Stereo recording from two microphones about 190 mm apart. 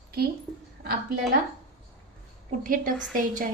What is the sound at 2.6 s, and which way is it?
Speech, 45° right (ahead or behind).